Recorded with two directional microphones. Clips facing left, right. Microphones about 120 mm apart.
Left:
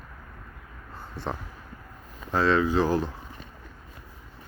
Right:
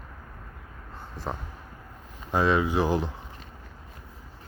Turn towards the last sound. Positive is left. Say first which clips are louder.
# left 1 dB
turn(degrees=-15)  # may be behind; listen again after turning